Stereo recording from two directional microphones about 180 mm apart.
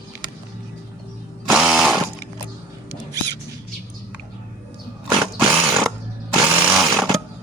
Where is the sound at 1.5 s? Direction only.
5° right (ahead or behind).